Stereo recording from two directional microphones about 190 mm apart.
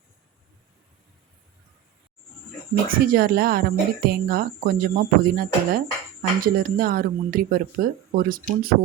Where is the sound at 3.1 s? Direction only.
55° right (ahead or behind).